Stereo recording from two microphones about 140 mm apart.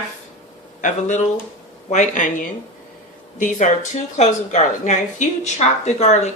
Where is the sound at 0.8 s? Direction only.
60° left (ahead or behind).